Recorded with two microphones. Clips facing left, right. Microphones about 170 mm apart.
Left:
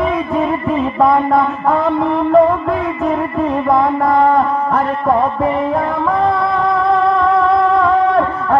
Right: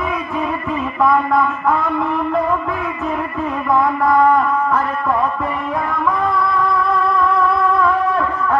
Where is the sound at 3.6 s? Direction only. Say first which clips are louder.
Even; 30° left (ahead or behind).